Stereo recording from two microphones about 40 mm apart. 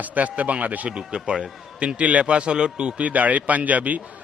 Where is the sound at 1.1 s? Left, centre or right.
Centre.